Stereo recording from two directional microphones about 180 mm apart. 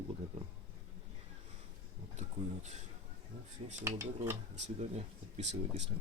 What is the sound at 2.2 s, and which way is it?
Speech, 40° right (ahead or behind).